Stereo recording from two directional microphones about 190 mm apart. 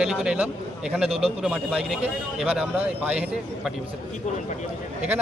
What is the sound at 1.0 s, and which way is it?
Speech, 30° right (ahead or behind).